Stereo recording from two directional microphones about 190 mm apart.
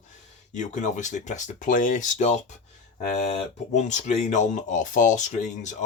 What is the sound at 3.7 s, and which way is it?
Speech, 40° left (ahead or behind).